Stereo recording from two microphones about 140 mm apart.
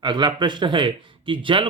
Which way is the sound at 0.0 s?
30° right (ahead or behind).